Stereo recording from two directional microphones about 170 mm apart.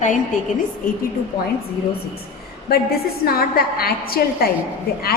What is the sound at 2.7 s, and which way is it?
A woman's voice, 65° left (ahead or behind).